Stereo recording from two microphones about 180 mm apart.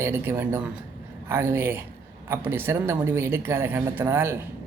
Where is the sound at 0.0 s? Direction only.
15° right (ahead or behind).